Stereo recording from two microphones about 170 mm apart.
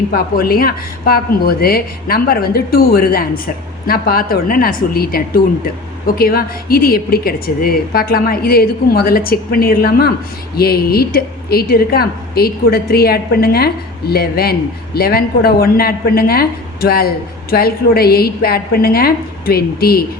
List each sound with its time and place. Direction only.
0.1 s a woman's voice: 60° left (ahead or behind)